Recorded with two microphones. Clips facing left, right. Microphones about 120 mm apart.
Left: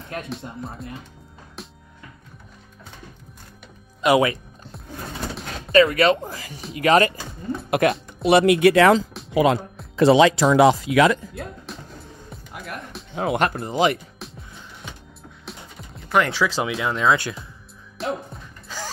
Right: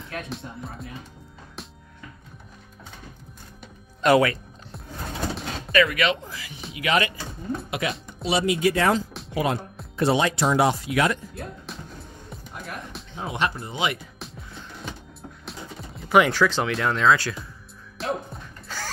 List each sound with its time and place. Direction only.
0.3 s speech: centre (ahead or behind)
4.0 s speech: 15° left (ahead or behind)
5.7 s speech: 30° left (ahead or behind)
7.8 s speech: 50° left (ahead or behind)
8.2 s speech: 60° left (ahead or behind); by 11.1 s 90° left
13.1 s speech: 70° left (ahead or behind)
13.4 s speech: 55° left (ahead or behind)
13.7 s speech: 40° left (ahead or behind)
15.4 s music: centre (ahead or behind)
16.3 s speech: 5° left (ahead or behind)
17.1 s speech: 20° left (ahead or behind)
17.9 s music: centre (ahead or behind)